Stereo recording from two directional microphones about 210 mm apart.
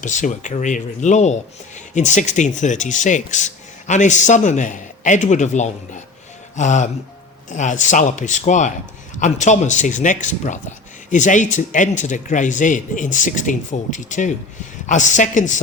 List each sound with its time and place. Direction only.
0.0 s speech: 35° left (ahead or behind)